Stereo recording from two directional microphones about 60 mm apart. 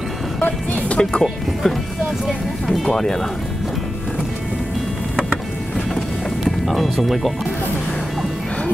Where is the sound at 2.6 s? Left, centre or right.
Centre.